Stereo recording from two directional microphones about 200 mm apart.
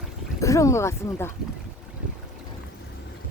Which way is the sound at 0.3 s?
15° left (ahead or behind).